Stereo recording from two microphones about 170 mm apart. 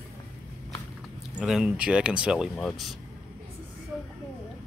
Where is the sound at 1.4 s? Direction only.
5° right (ahead or behind).